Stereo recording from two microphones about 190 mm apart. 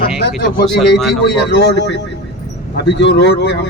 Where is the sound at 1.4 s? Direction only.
60° left (ahead or behind).